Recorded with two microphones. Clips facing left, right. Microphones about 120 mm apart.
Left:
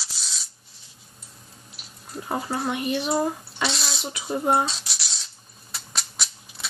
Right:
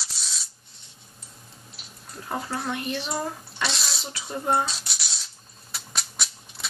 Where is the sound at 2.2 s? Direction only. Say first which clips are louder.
Left 3 dB; 10° left (ahead or behind).